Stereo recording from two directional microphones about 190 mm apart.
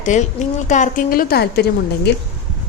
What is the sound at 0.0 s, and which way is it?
A woman's voice, 40° left (ahead or behind).